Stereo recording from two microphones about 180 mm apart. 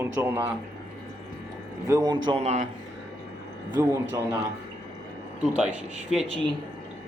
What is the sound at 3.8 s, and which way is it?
Speech, 15° right (ahead or behind).